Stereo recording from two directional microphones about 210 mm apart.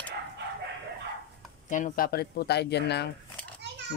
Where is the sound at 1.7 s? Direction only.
40° left (ahead or behind).